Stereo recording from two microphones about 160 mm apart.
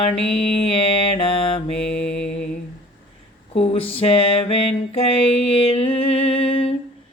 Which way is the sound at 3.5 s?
40° left (ahead or behind).